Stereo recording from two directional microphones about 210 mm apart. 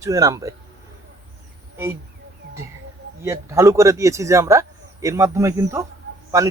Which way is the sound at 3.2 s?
15° right (ahead or behind).